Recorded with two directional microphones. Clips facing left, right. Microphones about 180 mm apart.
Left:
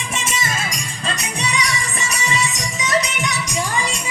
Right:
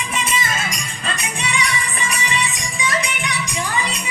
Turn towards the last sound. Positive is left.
turn(degrees=45)  # may be behind; listen again after turning